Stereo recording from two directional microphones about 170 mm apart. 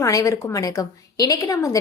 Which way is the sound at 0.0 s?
20° left (ahead or behind).